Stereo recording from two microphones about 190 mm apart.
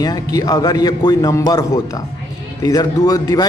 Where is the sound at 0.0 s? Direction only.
20° left (ahead or behind).